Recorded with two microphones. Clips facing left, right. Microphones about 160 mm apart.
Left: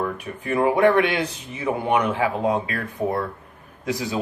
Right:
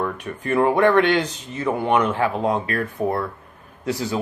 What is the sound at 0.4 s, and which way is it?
Speech, 10° left (ahead or behind).